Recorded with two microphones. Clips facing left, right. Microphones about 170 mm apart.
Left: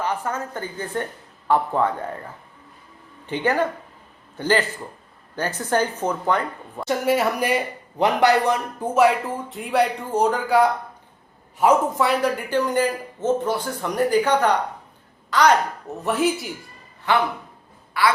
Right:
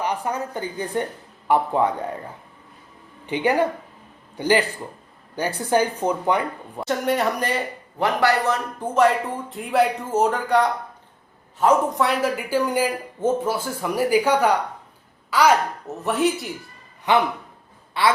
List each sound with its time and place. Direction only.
0.0 s speech: 15° right (ahead or behind)
3.2 s a man's voice: 15° right (ahead or behind)
6.8 s speech: 5° left (ahead or behind)
17.1 s a man's voice: 20° right (ahead or behind)